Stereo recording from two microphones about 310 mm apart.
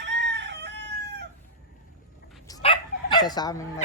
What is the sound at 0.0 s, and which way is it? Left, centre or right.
Chicken, right.